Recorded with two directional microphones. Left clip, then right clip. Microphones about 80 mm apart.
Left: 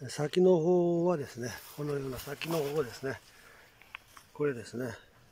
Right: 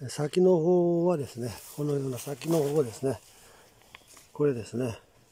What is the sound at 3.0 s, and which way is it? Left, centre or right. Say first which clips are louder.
Speech: right 7 dB; right.